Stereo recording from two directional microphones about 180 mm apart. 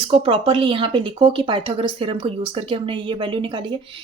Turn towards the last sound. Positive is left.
turn(degrees=-30)  # may be behind; listen again after turning